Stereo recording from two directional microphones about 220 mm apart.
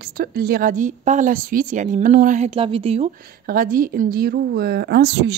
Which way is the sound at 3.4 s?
40° right (ahead or behind).